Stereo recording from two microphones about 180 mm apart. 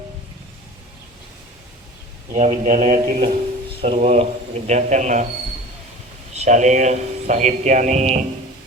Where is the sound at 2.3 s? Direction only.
45° right (ahead or behind).